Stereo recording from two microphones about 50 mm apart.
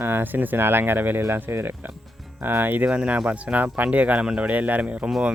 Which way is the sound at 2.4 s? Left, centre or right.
Right.